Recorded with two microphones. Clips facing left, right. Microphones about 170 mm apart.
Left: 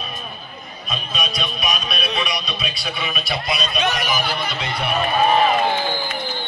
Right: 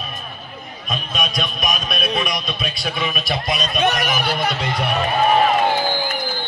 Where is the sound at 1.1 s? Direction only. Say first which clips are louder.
Right 2 dB; 50° right (ahead or behind).